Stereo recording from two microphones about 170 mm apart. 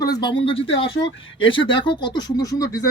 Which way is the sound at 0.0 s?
25° left (ahead or behind).